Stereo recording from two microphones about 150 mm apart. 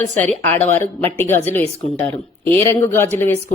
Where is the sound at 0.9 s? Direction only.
10° left (ahead or behind).